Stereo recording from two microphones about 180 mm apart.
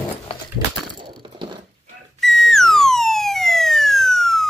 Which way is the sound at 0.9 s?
25° right (ahead or behind).